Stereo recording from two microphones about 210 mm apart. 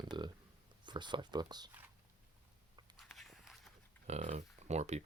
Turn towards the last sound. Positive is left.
turn(degrees=-30)  # may be behind; listen again after turning